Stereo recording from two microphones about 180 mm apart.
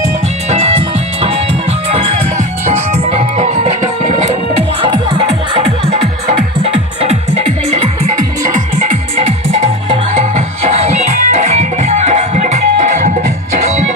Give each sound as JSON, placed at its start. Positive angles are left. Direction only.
{"t": 0.5, "sound": "music", "side_deg": -35}
{"t": 2.9, "sound": "music", "side_deg": -35}
{"t": 4.8, "sound": "music", "side_deg": -30}
{"t": 6.6, "sound": "music", "side_deg": -35}
{"t": 10.1, "sound": "music", "side_deg": -40}